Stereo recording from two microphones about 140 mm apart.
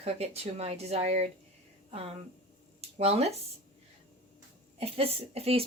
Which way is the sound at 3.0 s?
50° right (ahead or behind).